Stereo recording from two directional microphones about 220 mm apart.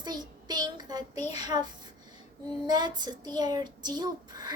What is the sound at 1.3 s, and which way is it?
A woman's voice, 20° right (ahead or behind).